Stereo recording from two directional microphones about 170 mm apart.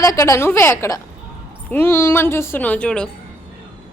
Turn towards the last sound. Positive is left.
turn(degrees=5)  # may be behind; listen again after turning